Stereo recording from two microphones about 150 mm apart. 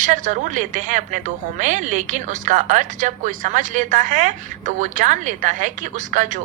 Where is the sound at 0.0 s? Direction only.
55° right (ahead or behind).